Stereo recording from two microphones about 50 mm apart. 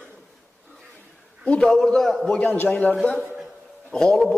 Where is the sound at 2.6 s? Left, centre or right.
Left.